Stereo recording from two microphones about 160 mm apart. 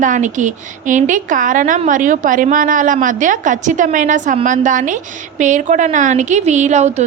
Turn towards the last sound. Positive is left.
turn(degrees=-45)  # may be behind; listen again after turning